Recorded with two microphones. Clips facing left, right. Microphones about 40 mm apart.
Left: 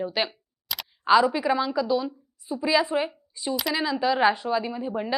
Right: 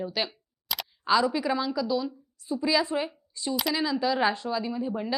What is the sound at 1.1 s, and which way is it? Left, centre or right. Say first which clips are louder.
A woman's voice: left 4 dB; centre.